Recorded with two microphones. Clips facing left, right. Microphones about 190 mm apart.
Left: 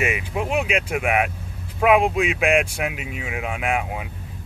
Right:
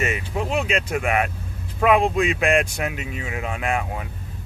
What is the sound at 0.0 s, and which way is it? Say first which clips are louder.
Speech: left 1 dB; 10° left (ahead or behind).